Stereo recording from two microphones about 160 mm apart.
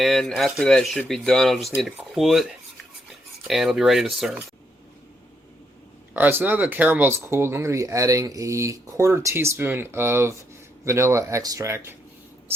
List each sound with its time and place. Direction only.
0.0 s speech: centre (ahead or behind)
6.1 s speech: 10° right (ahead or behind)